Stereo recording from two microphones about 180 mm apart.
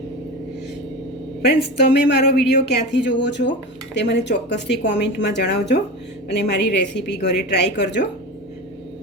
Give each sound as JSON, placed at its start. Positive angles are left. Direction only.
{"t": 2.0, "sound": "speech", "side_deg": 70}